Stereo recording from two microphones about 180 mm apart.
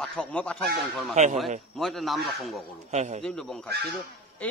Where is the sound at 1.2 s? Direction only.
40° right (ahead or behind).